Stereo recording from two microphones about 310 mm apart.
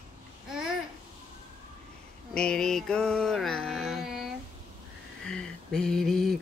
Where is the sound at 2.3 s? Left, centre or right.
Centre.